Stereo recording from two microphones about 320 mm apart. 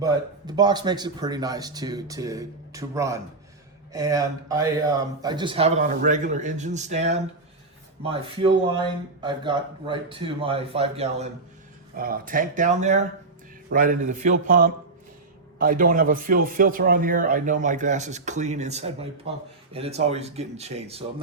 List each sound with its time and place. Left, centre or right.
0.0 s a man's voice: centre